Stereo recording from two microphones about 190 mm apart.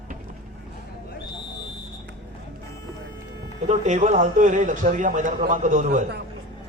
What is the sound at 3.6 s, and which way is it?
A man's voice, 40° right (ahead or behind).